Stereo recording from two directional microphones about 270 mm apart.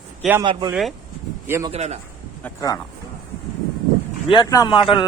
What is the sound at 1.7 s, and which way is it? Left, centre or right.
Speech, right.